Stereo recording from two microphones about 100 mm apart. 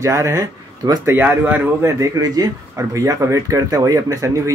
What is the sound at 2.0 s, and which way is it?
Speech, 35° right (ahead or behind).